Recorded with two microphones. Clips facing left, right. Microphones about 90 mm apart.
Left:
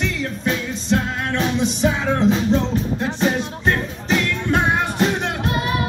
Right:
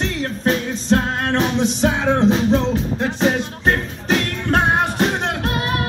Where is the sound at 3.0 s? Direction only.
60° right (ahead or behind).